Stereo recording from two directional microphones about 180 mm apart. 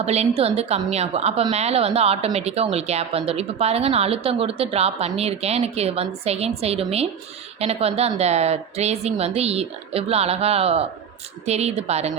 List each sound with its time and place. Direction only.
0.0 s a woman's voice: 35° right (ahead or behind)